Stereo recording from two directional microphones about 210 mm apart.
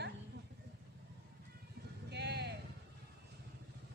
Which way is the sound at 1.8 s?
50° right (ahead or behind).